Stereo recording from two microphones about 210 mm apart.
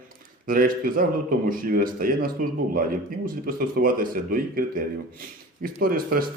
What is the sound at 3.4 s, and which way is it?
Speech, 45° right (ahead or behind).